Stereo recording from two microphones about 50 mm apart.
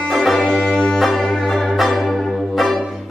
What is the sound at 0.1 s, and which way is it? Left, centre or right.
Music, centre.